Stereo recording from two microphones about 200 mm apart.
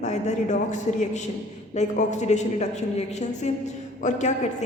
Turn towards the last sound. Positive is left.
turn(degrees=35)  # may be behind; listen again after turning